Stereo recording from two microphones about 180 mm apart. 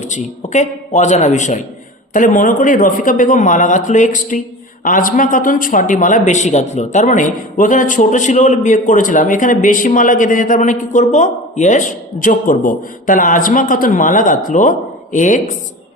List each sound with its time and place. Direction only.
0.0 s a man's voice: 40° left (ahead or behind)